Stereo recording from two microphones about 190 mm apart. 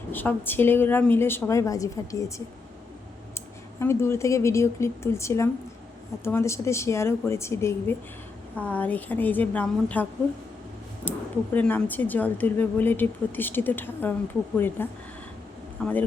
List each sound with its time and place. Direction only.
0.1 s speech: 10° left (ahead or behind)
3.3 s speech: 15° left (ahead or behind)